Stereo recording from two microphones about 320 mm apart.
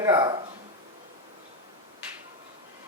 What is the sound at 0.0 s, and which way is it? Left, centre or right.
Speech, centre.